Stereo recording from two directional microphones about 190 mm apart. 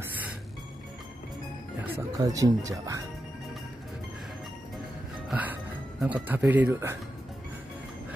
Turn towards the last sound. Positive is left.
turn(degrees=-10)  # may be behind; listen again after turning